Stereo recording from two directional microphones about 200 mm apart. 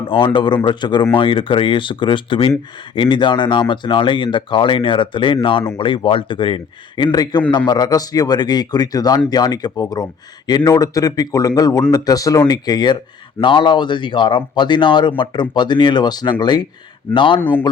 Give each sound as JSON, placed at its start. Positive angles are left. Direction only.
{"t": 0.3, "sound": "a man's voice", "side_deg": 25}